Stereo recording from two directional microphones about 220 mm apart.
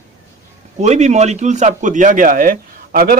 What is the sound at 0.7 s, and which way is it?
A man's voice, 30° right (ahead or behind).